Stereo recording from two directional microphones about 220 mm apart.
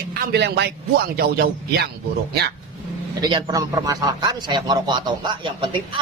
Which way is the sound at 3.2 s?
15° right (ahead or behind).